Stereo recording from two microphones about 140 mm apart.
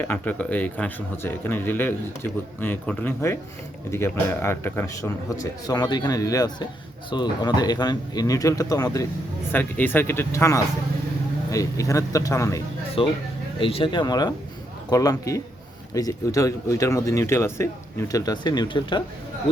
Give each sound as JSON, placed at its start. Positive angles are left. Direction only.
{"t": 0.0, "sound": "a man's voice", "side_deg": 10}
{"t": 9.5, "sound": "a man's voice", "side_deg": 10}
{"t": 13.0, "sound": "a man's voice", "side_deg": 40}